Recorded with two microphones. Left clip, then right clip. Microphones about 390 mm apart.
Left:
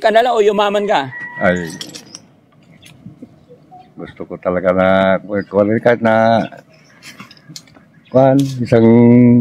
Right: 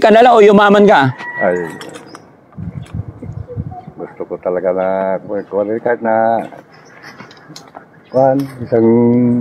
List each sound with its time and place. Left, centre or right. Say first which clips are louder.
0.0 s speech: right 5 dB; right
4.0 s speech: right 1 dB; left
8.1 s speech: left 1 dB; left